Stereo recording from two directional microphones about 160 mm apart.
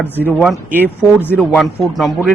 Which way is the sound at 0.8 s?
10° left (ahead or behind).